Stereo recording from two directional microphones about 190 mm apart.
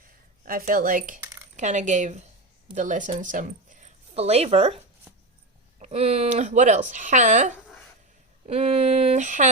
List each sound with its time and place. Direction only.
0.4 s speech: 45° right (ahead or behind)
1.2 s a sound: 15° right (ahead or behind)
1.5 s speech: 40° right (ahead or behind)
5.8 s speech: 30° right (ahead or behind)